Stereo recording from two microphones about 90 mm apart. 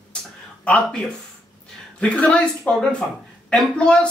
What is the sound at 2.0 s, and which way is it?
Speech, 15° left (ahead or behind).